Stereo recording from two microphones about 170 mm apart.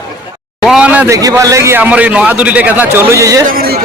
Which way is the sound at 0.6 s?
5° right (ahead or behind).